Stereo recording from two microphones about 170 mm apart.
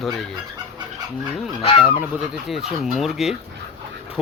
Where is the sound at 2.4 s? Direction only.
Centre (ahead or behind).